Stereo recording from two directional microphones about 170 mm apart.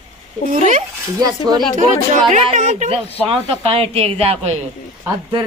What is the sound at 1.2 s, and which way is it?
Speech, 20° right (ahead or behind).